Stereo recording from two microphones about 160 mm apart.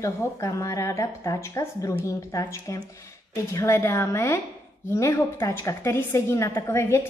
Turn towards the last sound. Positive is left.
turn(degrees=15)  # may be behind; listen again after turning